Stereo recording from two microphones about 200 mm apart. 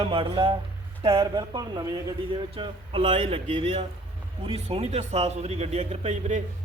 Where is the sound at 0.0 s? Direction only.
25° right (ahead or behind).